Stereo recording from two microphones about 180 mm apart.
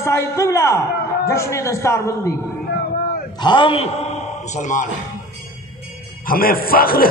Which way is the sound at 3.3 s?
25° left (ahead or behind).